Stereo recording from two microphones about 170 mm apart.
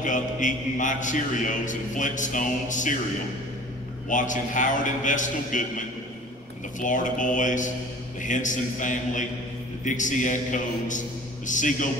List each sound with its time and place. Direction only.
0.0 s a man's voice: 50° left (ahead or behind)
4.1 s a man's voice: 50° left (ahead or behind)